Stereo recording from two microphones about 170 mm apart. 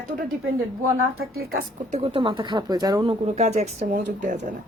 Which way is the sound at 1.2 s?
65° right (ahead or behind).